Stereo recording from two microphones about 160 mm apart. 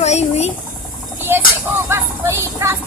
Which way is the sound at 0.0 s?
45° left (ahead or behind).